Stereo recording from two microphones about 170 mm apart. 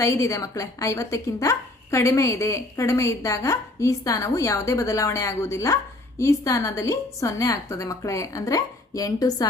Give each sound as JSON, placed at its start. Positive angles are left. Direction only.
{"t": 0.0, "sound": "a woman's voice", "side_deg": 20}